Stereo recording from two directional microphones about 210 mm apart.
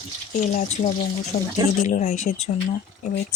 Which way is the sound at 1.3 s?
40° left (ahead or behind).